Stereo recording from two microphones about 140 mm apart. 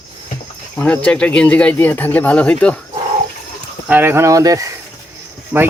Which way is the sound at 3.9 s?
15° right (ahead or behind).